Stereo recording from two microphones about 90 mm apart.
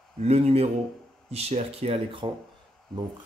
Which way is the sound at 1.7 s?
90° right.